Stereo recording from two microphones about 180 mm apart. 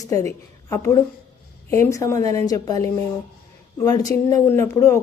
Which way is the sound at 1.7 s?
15° left (ahead or behind).